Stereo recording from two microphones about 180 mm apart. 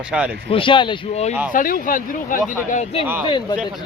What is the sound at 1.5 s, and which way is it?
Speech, 50° left (ahead or behind).